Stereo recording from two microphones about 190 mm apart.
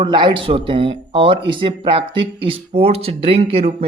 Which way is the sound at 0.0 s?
25° right (ahead or behind).